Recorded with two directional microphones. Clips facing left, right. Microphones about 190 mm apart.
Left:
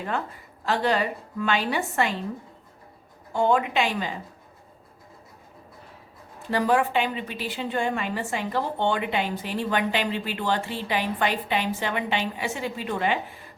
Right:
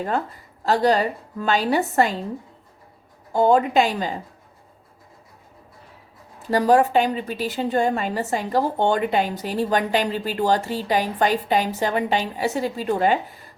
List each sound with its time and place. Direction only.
0.6 s a woman's voice: 40° right (ahead or behind)
3.3 s a woman's voice: 40° right (ahead or behind)
6.5 s a woman's voice: 40° right (ahead or behind)